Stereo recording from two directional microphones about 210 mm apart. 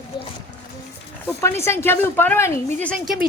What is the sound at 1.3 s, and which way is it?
Speech, 10° left (ahead or behind).